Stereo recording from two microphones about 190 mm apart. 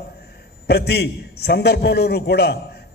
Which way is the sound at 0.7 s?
60° left (ahead or behind).